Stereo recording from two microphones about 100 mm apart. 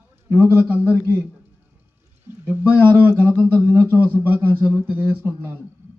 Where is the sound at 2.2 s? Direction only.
20° right (ahead or behind).